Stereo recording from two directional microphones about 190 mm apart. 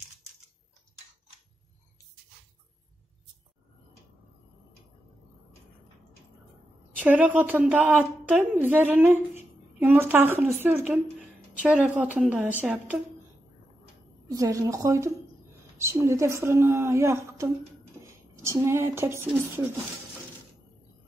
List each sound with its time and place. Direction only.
7.0 s a woman's voice: 10° right (ahead or behind)
14.3 s a woman's voice: 15° right (ahead or behind)